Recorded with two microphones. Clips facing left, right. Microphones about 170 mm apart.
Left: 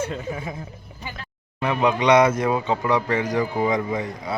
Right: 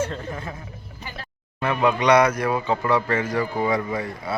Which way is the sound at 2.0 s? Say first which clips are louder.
Left 2 dB; 20° left (ahead or behind).